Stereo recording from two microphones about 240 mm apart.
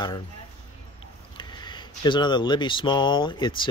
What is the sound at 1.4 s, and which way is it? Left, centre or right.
Speech, centre.